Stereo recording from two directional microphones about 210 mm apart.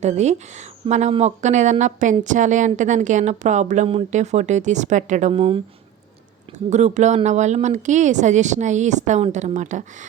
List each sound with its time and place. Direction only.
0.0 s speech: 30° right (ahead or behind)
6.7 s speech: 35° right (ahead or behind)